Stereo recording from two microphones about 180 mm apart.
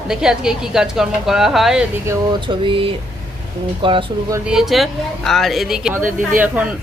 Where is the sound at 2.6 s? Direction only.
30° right (ahead or behind).